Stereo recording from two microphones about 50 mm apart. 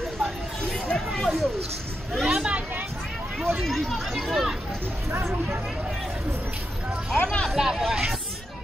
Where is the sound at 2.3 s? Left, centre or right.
Centre.